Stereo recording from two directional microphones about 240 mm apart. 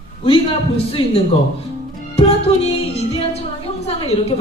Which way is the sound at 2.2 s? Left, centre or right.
Left.